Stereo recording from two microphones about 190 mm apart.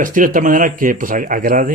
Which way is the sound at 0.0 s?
45° right (ahead or behind).